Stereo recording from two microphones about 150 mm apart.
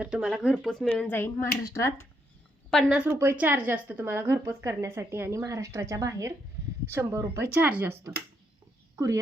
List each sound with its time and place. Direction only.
0.0 s speech: 5° right (ahead or behind)
0.9 s a woman's voice: 15° left (ahead or behind)
2.9 s speech: 15° right (ahead or behind)